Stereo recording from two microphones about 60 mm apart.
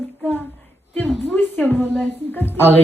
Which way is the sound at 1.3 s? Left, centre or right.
Left.